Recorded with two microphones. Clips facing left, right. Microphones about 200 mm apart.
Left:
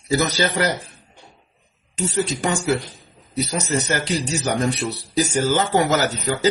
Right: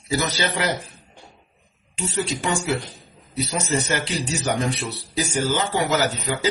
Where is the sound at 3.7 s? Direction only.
45° left (ahead or behind).